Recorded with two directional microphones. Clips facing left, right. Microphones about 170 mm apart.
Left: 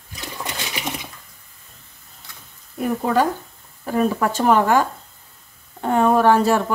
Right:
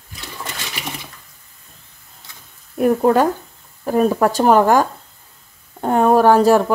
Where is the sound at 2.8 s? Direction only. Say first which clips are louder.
Right 5 dB; 50° right (ahead or behind).